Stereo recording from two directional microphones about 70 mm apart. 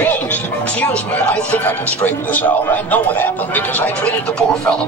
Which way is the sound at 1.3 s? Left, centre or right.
Left.